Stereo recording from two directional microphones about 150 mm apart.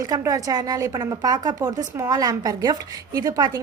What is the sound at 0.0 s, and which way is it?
A woman's voice, 25° right (ahead or behind).